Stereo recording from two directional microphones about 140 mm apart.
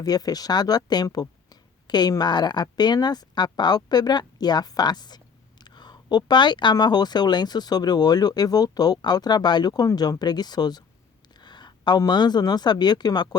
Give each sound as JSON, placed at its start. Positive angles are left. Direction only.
{"t": 0.0, "sound": "speech", "side_deg": 25}